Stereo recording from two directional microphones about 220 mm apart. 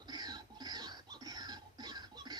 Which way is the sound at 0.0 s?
20° right (ahead or behind).